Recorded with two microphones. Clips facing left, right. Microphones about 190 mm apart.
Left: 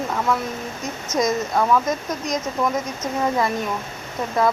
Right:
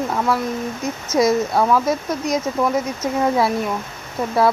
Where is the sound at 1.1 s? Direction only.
10° right (ahead or behind).